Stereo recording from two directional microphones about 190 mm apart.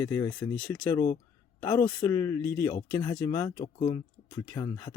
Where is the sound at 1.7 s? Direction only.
15° left (ahead or behind).